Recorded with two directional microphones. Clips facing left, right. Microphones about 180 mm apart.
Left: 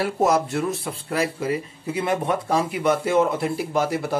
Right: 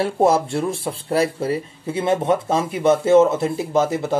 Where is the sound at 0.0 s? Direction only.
30° right (ahead or behind).